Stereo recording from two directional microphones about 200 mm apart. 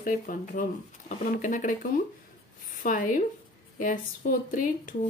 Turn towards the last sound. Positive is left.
turn(degrees=45)  # may be behind; listen again after turning